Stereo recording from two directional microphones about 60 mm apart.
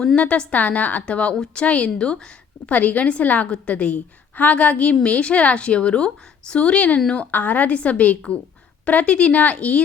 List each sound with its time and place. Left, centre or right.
0.2 s a woman's voice: centre
2.7 s a woman's voice: left